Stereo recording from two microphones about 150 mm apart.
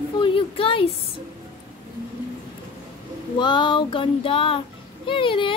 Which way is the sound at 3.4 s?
30° left (ahead or behind).